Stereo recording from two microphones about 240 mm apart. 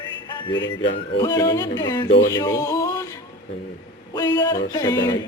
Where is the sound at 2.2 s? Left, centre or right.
Centre.